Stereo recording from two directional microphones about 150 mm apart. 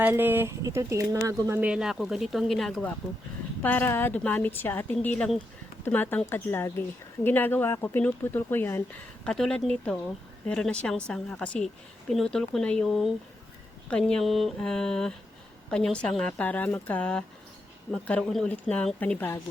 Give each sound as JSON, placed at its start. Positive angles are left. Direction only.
{"t": 0.0, "sound": "speech", "side_deg": -15}
{"t": 1.6, "sound": "a woman's voice", "side_deg": -5}
{"t": 9.2, "sound": "a woman's voice", "side_deg": 5}